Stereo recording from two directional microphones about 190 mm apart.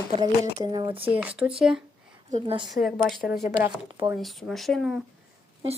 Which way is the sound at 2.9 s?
Centre (ahead or behind).